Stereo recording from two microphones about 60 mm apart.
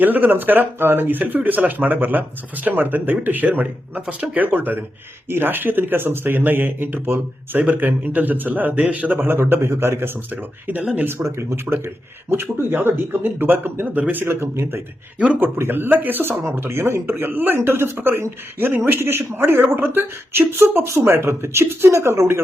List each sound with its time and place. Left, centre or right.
0.0 s speech: right
10.3 s speech: right
11.1 s speech: right
16.4 s speech: right